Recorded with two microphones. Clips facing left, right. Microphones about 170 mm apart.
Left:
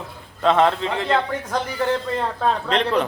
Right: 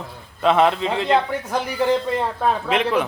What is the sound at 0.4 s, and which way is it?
Speech, 10° right (ahead or behind).